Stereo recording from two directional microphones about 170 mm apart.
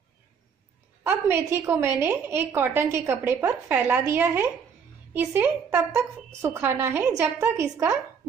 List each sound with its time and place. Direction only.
1.0 s a woman's voice: 15° right (ahead or behind)